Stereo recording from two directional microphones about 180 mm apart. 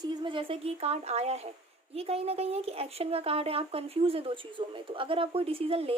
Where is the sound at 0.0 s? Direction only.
25° right (ahead or behind).